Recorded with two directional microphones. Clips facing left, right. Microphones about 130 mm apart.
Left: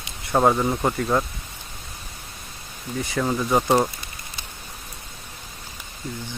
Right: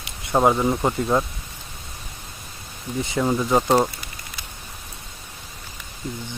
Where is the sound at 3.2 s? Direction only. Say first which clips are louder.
Right 2 dB; 10° right (ahead or behind).